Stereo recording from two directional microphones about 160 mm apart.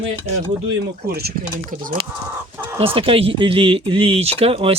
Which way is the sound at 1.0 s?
75° right (ahead or behind).